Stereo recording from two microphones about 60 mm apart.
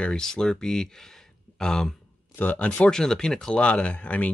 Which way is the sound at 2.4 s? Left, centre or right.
Left.